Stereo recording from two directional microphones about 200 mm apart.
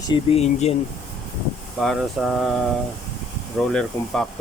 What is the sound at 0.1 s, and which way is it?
Speech, 30° left (ahead or behind).